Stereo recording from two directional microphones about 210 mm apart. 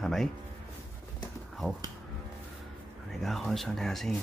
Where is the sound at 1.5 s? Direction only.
Centre (ahead or behind).